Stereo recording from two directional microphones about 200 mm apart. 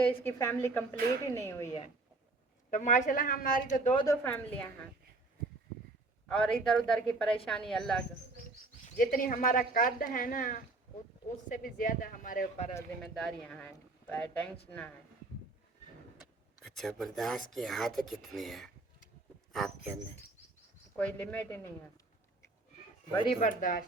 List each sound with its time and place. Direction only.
0.0 s speech: 10° left (ahead or behind)
2.6 s a man's voice: 40° left (ahead or behind)
3.9 s speech: 15° left (ahead or behind)
6.2 s speech: 5° left (ahead or behind)
8.8 s speech: 45° left (ahead or behind)
13.0 s speech: centre (ahead or behind)
16.6 s speech: centre (ahead or behind)
20.9 s speech: 5° left (ahead or behind)
23.1 s speech: 25° left (ahead or behind)
23.4 s a man's voice: 40° left (ahead or behind)